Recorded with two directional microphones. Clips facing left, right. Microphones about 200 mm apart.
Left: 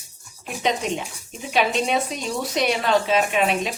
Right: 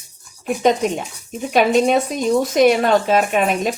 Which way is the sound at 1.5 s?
45° right (ahead or behind).